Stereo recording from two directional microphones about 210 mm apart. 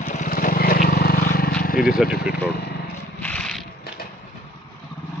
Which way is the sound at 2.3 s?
50° left (ahead or behind).